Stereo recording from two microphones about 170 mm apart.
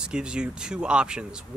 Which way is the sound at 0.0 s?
5° right (ahead or behind).